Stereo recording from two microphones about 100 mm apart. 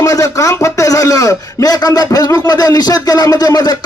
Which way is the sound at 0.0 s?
35° left (ahead or behind).